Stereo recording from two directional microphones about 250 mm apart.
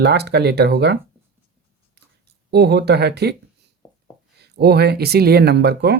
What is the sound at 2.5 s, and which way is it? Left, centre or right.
Speech, right.